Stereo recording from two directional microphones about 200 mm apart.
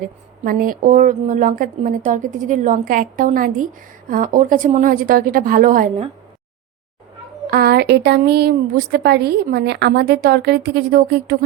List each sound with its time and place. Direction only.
0.0 s speech: 45° right (ahead or behind)
7.5 s speech: 50° right (ahead or behind)